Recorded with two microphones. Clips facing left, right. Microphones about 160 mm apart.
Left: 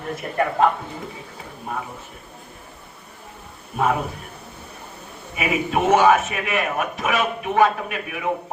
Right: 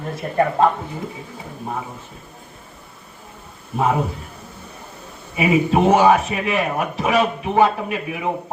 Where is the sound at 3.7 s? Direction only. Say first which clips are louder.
Right 2 dB; 25° right (ahead or behind).